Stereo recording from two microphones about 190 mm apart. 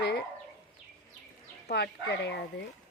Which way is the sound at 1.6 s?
60° left (ahead or behind).